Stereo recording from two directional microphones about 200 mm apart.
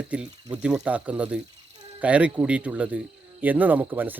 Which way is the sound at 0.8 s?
5° right (ahead or behind).